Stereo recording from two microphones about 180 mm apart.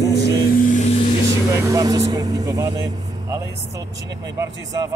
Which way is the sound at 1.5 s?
20° right (ahead or behind).